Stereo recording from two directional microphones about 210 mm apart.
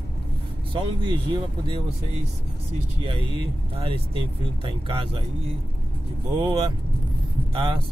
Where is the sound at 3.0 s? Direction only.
25° right (ahead or behind).